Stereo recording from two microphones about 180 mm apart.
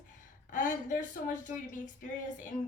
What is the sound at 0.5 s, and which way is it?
A woman's voice, 45° left (ahead or behind).